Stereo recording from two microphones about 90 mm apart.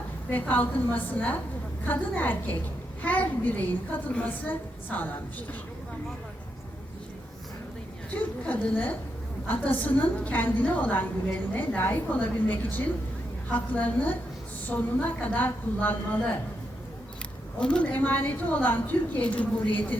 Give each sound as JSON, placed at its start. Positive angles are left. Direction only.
{"t": 0.3, "sound": "a woman's voice", "side_deg": 20}
{"t": 8.1, "sound": "a woman's voice", "side_deg": 20}
{"t": 17.6, "sound": "a woman's voice", "side_deg": 10}